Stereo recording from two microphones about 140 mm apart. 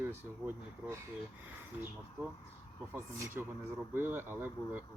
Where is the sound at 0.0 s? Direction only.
15° right (ahead or behind).